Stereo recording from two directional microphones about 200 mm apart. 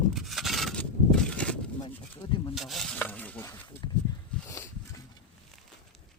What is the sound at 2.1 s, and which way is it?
Rub, 25° left (ahead or behind).